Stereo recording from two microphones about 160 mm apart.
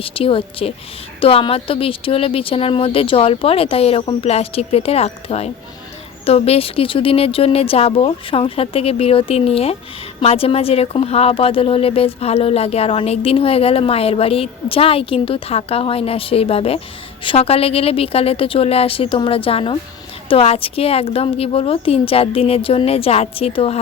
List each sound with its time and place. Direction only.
0.0 s speech: 35° left (ahead or behind)